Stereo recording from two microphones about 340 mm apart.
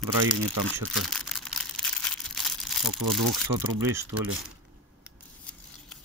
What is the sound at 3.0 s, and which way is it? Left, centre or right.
Speech, right.